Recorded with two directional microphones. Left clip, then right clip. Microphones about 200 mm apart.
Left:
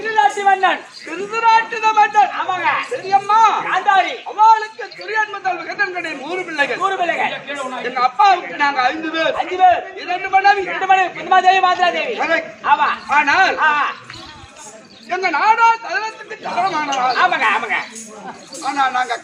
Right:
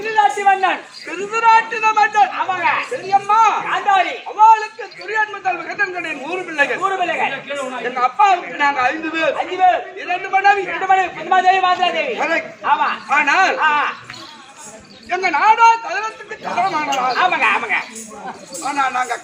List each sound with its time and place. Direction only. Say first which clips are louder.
0.0 s a sound: even; 15° left (ahead or behind)
1.1 s a man's voice: right 1 dB; 5° right (ahead or behind)
3.7 s a man's voice: left 1 dB; 10° left (ahead or behind)
9.6 s a man's voice: left 3 dB; 15° left (ahead or behind)
13.1 s a man's voice: even; centre (ahead or behind)
13.6 s a man's voice: even; 15° left (ahead or behind)
15.1 s a man's voice: right 1 dB; 5° right (ahead or behind); by 17.8 s 15° left (ahead or behind)
18.6 s a man's voice: left 1 dB; 5° left (ahead or behind)